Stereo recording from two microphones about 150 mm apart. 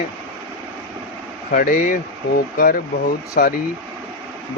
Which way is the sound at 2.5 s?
85° left.